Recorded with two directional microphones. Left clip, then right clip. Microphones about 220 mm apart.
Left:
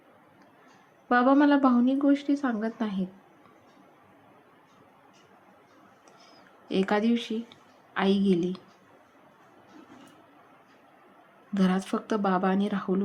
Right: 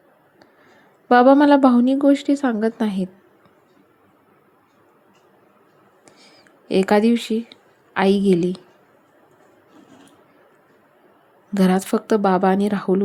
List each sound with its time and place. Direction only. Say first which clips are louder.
1.0 s a woman's voice: right 9 dB; 30° right (ahead or behind)
6.7 s a woman's voice: right 9 dB; 30° right (ahead or behind)
11.5 s a woman's voice: right 9 dB; 30° right (ahead or behind)